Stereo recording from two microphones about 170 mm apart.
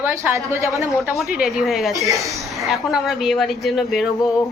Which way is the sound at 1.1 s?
Centre (ahead or behind).